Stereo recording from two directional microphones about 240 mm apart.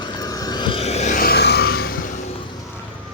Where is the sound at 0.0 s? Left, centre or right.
Centre; by 2.0 s left.